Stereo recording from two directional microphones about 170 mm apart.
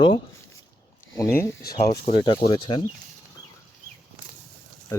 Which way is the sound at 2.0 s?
30° left (ahead or behind).